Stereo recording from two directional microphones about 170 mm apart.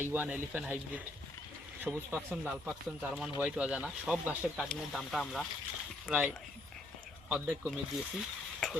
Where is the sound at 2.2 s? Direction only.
5° right (ahead or behind).